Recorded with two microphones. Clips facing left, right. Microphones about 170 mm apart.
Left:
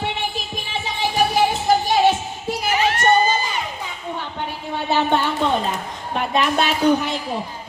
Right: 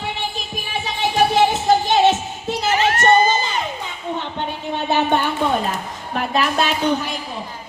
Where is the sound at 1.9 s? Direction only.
25° right (ahead or behind).